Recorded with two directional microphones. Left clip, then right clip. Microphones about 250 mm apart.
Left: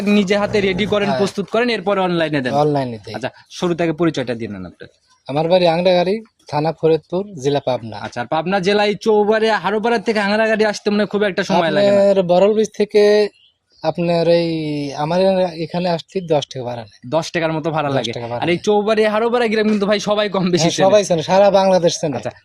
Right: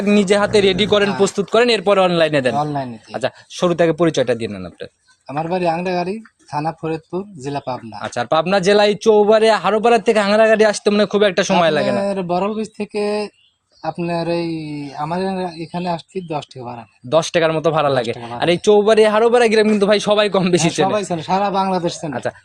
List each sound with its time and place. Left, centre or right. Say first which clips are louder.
0.0 s speech: right 2 dB; centre
2.6 s speech: left 4 dB; left
3.1 s speech: right 3 dB; centre
5.4 s speech: left 5 dB; left
8.0 s speech: right 5 dB; centre
11.9 s speech: left 6 dB; left
17.1 s speech: right 4 dB; centre
18.1 s speech: left 1 dB; left
18.3 s speech: right 3 dB; centre
20.8 s speech: left 6 dB; left
22.1 s speech: right 1 dB; centre